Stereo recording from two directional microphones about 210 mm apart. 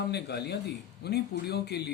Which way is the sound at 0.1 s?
50° left (ahead or behind).